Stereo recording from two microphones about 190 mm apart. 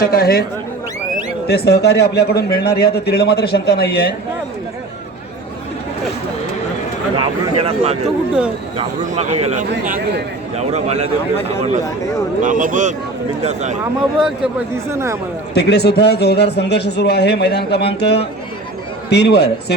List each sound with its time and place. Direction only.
0.0 s speech: 55° left (ahead or behind)
1.5 s a man's voice: 60° left (ahead or behind)
7.2 s speech: 30° right (ahead or behind)
12.4 s speech: 45° right (ahead or behind)
14.8 s speech: 15° right (ahead or behind)
15.5 s a man's voice: 60° left (ahead or behind)